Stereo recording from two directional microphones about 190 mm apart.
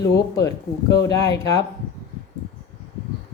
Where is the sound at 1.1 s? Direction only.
20° left (ahead or behind).